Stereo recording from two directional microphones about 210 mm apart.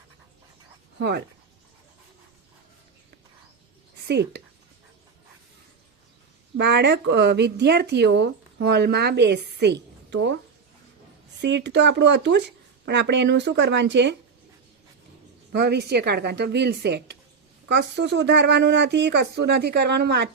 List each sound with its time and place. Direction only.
0.9 s speech: 50° right (ahead or behind)
4.0 s a woman's voice: 55° right (ahead or behind)
6.6 s speech: 55° right (ahead or behind)
11.3 s speech: 55° right (ahead or behind)
15.5 s speech: 55° right (ahead or behind)